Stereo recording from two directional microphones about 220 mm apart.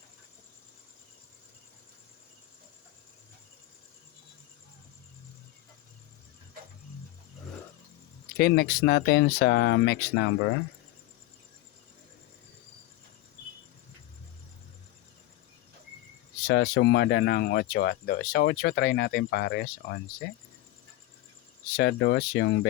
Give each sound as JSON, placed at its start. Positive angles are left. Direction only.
{"t": 8.4, "sound": "speech", "side_deg": 45}
{"t": 16.5, "sound": "speech", "side_deg": 55}
{"t": 21.8, "sound": "speech", "side_deg": 50}